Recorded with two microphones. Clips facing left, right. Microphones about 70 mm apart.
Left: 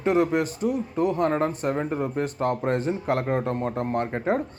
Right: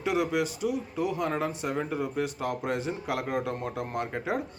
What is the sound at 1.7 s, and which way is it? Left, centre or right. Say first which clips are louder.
A man's voice: left 4 dB; left.